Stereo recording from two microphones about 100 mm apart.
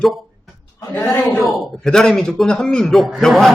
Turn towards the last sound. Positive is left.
turn(degrees=0)  # may be behind; listen again after turning